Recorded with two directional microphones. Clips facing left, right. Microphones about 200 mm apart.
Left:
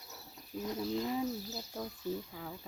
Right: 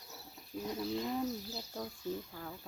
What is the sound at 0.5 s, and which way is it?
Speech, 5° left (ahead or behind).